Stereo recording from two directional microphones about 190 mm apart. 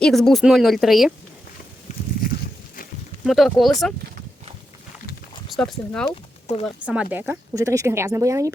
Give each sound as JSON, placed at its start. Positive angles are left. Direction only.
{"t": 0.0, "sound": "speech", "side_deg": 0}
{"t": 1.9, "sound": "a sound", "side_deg": 35}
{"t": 3.2, "sound": "speech", "side_deg": 0}
{"t": 5.5, "sound": "speech", "side_deg": 5}
{"t": 6.5, "sound": "speech", "side_deg": 35}
{"t": 6.8, "sound": "speech", "side_deg": -5}